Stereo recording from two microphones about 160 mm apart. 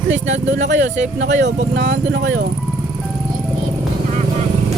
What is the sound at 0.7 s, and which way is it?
Speech, 50° right (ahead or behind).